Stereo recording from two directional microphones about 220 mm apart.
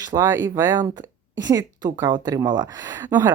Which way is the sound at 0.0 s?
15° right (ahead or behind).